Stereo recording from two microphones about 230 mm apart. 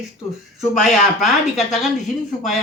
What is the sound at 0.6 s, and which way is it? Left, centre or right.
Speech, centre.